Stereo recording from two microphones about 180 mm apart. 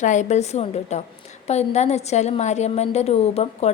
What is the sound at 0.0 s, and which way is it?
A woman's voice, 40° left (ahead or behind).